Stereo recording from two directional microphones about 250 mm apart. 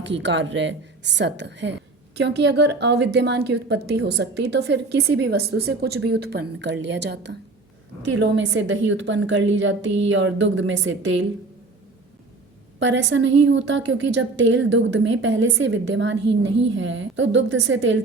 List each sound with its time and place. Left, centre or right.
0.0 s a woman's voice: right
12.8 s a woman's voice: right